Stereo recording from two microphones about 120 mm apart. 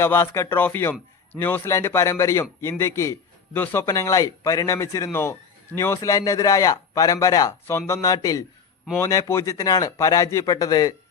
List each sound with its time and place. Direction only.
0.0 s a man's voice: 20° left (ahead or behind)